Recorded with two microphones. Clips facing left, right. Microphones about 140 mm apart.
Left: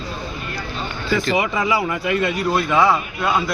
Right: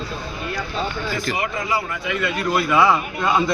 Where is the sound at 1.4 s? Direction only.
90° left.